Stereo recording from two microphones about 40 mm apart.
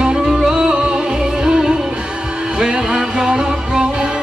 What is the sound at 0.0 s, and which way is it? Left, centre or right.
Music, centre.